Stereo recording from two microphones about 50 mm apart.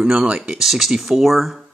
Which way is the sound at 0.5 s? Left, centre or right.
Centre.